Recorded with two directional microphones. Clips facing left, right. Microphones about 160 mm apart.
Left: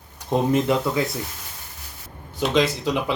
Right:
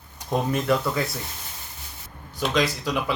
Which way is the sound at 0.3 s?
20° left (ahead or behind).